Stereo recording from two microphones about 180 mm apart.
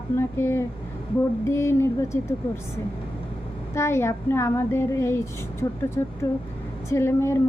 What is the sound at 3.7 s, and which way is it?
Speech, 15° left (ahead or behind).